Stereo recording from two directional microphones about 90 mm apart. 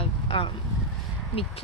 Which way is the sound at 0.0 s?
80° left.